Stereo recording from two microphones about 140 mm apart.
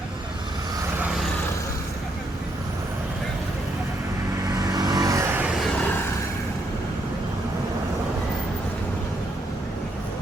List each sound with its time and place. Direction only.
4.5 s vehicle: 25° right (ahead or behind)
5.5 s vehicle: centre (ahead or behind)